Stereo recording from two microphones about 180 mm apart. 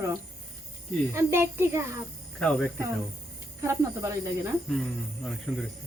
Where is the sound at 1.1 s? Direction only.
15° right (ahead or behind).